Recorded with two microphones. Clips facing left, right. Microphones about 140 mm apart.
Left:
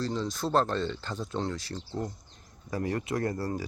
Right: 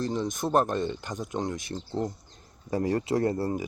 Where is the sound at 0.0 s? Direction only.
20° right (ahead or behind).